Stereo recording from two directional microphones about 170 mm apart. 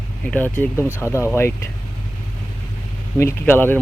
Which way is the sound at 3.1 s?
15° left (ahead or behind).